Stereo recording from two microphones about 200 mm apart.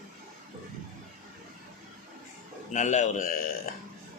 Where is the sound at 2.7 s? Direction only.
40° left (ahead or behind).